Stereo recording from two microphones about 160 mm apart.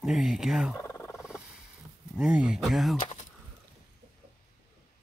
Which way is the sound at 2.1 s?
5° right (ahead or behind).